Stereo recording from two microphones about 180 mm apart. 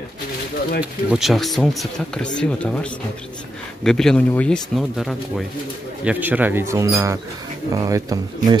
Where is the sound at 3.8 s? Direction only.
5° left (ahead or behind); by 8.6 s 20° right (ahead or behind).